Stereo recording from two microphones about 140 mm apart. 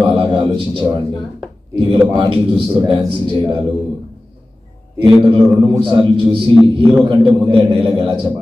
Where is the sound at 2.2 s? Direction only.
35° right (ahead or behind).